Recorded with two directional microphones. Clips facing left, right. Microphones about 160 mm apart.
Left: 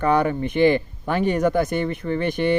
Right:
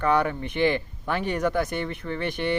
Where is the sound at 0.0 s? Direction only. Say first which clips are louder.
Left 4 dB; 15° left (ahead or behind).